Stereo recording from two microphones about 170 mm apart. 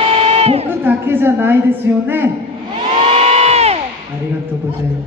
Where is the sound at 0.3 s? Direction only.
35° right (ahead or behind).